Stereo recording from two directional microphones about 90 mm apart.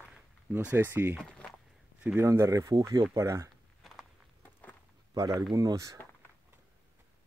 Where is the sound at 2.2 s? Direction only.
35° right (ahead or behind).